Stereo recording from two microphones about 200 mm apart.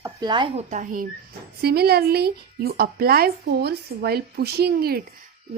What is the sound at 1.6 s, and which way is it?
A woman's voice, 50° right (ahead or behind).